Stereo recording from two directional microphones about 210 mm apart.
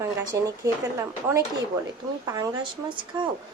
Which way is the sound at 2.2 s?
15° right (ahead or behind).